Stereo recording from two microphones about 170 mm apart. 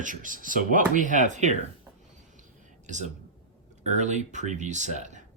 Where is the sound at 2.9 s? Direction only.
45° right (ahead or behind).